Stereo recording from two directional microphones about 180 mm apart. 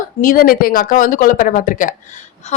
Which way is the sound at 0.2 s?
50° left (ahead or behind).